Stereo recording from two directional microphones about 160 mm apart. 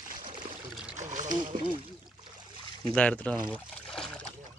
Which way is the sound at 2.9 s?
5° left (ahead or behind).